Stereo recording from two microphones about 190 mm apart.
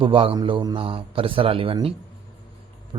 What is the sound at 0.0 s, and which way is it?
A man's voice, 30° right (ahead or behind).